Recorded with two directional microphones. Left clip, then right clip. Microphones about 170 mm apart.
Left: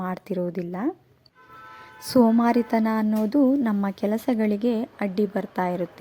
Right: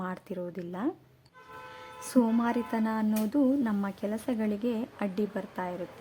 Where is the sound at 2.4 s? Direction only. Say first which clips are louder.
Left 8 dB; 30° left (ahead or behind).